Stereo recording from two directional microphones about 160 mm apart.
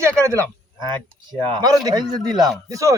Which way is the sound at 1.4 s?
25° right (ahead or behind).